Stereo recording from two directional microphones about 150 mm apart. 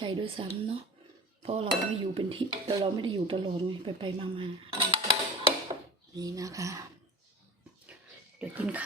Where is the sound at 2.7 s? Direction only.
35° right (ahead or behind).